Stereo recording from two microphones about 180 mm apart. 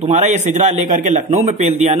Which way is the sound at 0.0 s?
40° right (ahead or behind).